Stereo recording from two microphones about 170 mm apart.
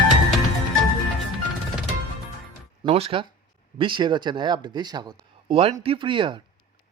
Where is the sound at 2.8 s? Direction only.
35° right (ahead or behind).